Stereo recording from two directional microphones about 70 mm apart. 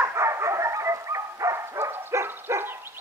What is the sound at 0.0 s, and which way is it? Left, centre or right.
Dog, right.